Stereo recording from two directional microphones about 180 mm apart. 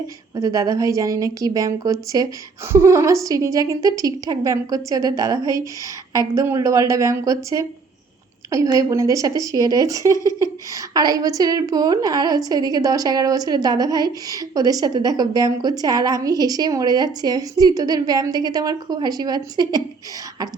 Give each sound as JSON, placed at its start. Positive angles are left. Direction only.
{"t": 0.3, "sound": "a woman's voice", "side_deg": -20}